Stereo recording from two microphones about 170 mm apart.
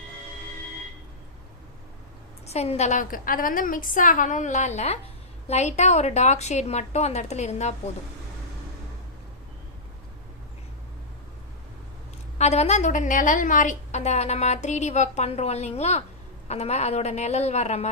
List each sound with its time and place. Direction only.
2.5 s a woman's voice: 40° left (ahead or behind)
12.4 s a woman's voice: 40° left (ahead or behind)